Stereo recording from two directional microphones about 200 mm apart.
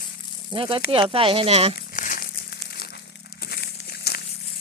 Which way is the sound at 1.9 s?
45° left (ahead or behind).